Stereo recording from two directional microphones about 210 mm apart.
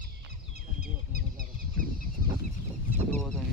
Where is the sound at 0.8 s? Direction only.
45° right (ahead or behind).